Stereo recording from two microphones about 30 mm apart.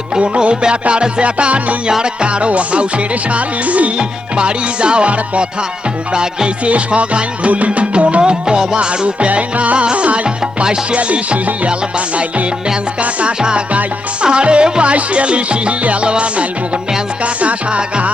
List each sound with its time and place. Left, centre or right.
0.6 s music: right
3.9 s music: right
6.7 s music: right
8.2 s music: right
10.2 s music: right
10.9 s music: right
14.2 s music: right